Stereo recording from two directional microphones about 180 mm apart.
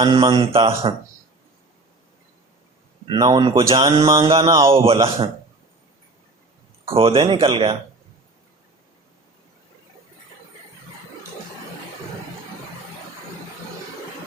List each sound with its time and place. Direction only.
0.0 s speech: 30° right (ahead or behind)
3.1 s speech: 25° right (ahead or behind)
3.7 s a sound: 20° right (ahead or behind)
4.3 s speech: 30° right (ahead or behind)
6.9 s speech: 30° right (ahead or behind)